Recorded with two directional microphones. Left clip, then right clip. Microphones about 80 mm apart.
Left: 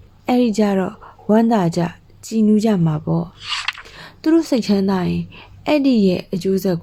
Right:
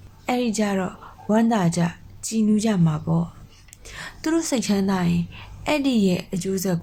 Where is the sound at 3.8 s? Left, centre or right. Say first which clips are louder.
Left 5 dB; left.